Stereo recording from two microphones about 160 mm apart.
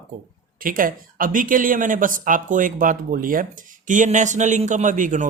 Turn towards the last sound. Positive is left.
turn(degrees=-55)  # may be behind; listen again after turning